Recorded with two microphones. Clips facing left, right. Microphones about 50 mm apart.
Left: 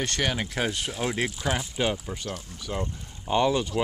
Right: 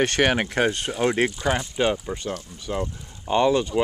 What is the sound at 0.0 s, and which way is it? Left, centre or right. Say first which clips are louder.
Speech: right 7 dB; right.